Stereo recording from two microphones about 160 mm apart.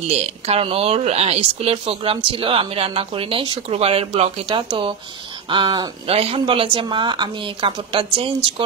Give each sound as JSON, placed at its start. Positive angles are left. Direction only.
{"t": 0.1, "sound": "speech", "side_deg": -35}